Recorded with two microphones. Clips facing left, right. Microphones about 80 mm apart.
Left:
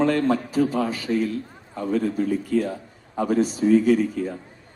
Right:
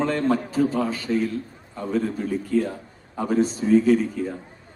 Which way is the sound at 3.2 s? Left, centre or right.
Right.